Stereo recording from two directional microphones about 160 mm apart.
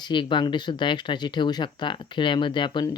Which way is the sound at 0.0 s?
30° left (ahead or behind).